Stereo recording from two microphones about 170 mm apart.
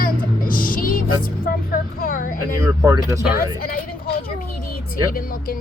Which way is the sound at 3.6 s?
60° left (ahead or behind).